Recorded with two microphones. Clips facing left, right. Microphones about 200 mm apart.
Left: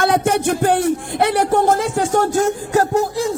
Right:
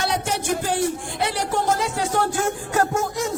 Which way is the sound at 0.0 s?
55° left (ahead or behind).